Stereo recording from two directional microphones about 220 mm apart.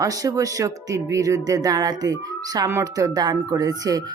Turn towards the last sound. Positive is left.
turn(degrees=-15)  # may be behind; listen again after turning